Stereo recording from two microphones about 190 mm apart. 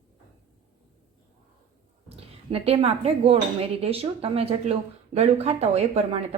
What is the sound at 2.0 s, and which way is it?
A woman's voice, 30° right (ahead or behind).